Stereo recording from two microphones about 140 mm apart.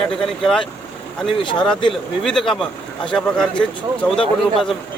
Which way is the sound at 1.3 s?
35° left (ahead or behind).